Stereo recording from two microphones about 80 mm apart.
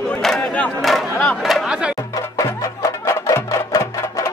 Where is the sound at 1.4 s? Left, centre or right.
Centre.